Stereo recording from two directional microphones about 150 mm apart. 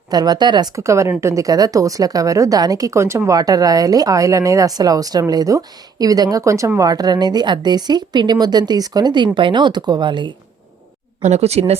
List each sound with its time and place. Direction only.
0.1 s a woman's voice: 25° right (ahead or behind)
11.2 s speech: 50° right (ahead or behind)